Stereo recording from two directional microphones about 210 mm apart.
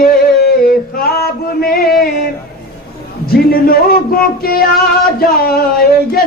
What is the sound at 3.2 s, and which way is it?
Music, 45° left (ahead or behind).